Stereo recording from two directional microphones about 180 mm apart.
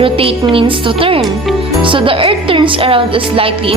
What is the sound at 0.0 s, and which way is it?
Speech, 30° right (ahead or behind).